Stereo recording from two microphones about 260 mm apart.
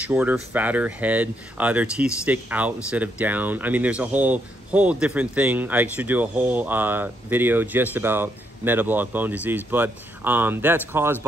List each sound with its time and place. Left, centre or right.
0.0 s speech: centre